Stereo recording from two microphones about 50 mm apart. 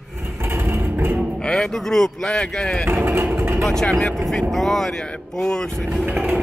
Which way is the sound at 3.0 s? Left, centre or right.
Right.